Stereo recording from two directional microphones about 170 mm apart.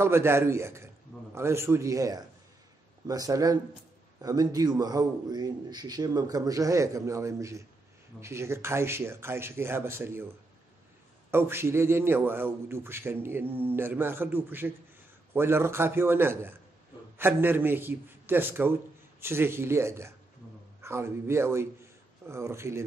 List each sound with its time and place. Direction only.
0.0 s a man's voice: 15° right (ahead or behind)